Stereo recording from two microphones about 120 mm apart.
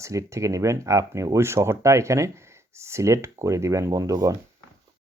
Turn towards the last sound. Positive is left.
turn(degrees=-25)  # may be behind; listen again after turning